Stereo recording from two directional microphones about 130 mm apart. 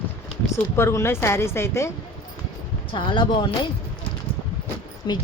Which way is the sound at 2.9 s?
35° left (ahead or behind).